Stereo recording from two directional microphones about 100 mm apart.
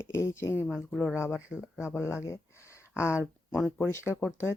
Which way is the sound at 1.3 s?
10° right (ahead or behind).